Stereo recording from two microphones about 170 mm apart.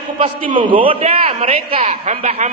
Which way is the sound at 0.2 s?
30° right (ahead or behind).